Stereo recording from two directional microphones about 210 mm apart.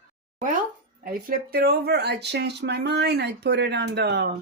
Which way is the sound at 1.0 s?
45° right (ahead or behind).